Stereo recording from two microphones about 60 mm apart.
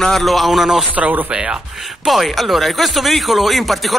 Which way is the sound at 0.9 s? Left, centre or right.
Right.